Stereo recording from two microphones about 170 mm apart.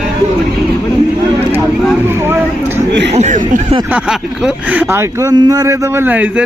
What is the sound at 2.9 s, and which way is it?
Speech, 90° right.